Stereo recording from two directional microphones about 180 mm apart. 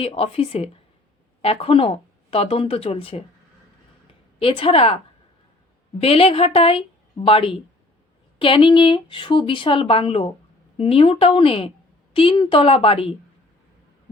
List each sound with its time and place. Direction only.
0.0 s speech: 30° left (ahead or behind)
4.4 s speech: 30° left (ahead or behind)
6.0 s speech: 35° left (ahead or behind)